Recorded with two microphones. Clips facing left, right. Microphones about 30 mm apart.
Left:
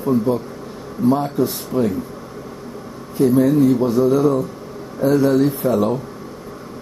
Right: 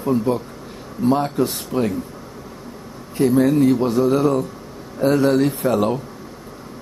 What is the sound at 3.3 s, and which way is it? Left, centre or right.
Speech, right.